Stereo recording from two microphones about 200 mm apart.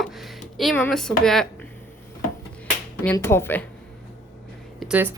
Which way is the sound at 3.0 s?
10° left (ahead or behind).